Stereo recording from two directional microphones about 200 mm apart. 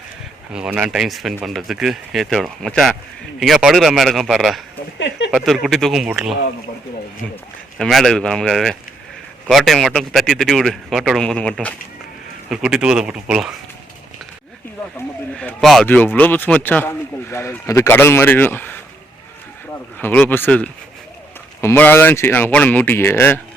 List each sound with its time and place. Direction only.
0.5 s speech: 5° right (ahead or behind)
4.9 s speech: 65° left (ahead or behind)
5.3 s speech: centre (ahead or behind)
7.8 s speech: centre (ahead or behind)
14.9 s speech: 5° left (ahead or behind)
20.0 s speech: 10° left (ahead or behind)